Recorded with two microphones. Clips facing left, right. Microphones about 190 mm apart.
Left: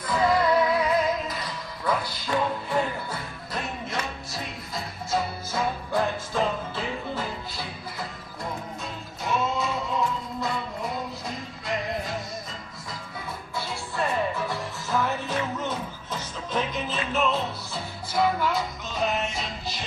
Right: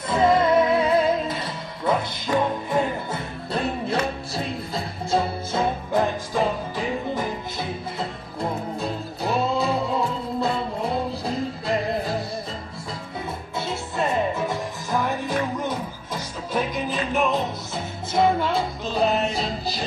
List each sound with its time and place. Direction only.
0.1 s music: 25° right (ahead or behind)
13.6 s music: 20° right (ahead or behind)